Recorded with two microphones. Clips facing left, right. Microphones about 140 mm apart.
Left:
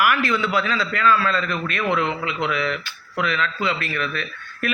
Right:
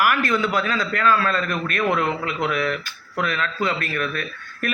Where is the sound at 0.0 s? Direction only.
45° right (ahead or behind).